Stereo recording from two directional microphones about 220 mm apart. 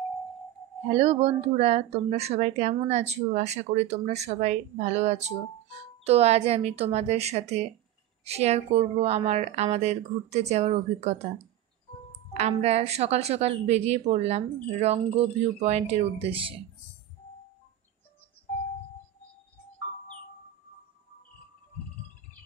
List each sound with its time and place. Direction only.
0.8 s speech: 30° right (ahead or behind)
12.4 s speech: 30° right (ahead or behind)